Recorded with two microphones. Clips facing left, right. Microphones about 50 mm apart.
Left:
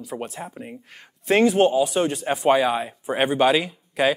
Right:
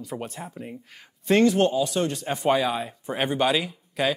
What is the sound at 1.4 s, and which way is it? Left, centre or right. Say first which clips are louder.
Speech: left 5 dB; centre.